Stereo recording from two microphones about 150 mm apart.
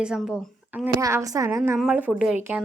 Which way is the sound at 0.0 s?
5° right (ahead or behind).